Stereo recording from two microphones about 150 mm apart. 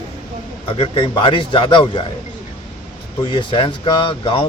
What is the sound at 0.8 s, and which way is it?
Speech, 40° left (ahead or behind).